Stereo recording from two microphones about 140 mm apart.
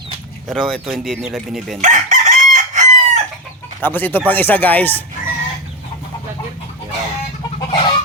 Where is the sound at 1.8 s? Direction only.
60° right (ahead or behind).